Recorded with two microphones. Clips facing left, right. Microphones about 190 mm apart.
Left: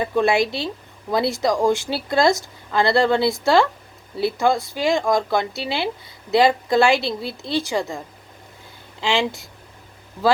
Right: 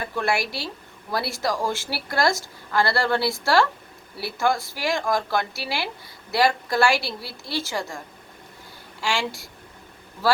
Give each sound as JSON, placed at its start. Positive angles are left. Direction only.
{"t": 0.0, "sound": "speech", "side_deg": 20}